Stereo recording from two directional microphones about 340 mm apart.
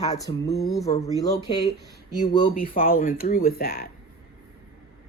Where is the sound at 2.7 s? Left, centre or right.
Left.